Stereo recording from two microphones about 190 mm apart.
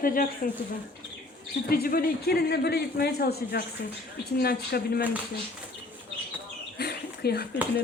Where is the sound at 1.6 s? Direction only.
50° left (ahead or behind).